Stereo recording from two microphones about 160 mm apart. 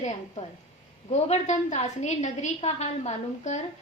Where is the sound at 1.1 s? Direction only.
45° left (ahead or behind).